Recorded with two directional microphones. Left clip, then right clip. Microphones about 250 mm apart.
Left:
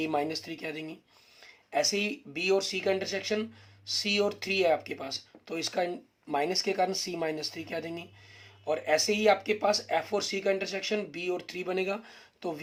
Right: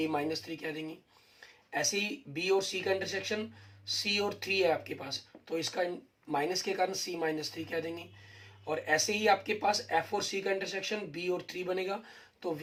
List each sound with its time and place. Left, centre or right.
0.0 s speech: left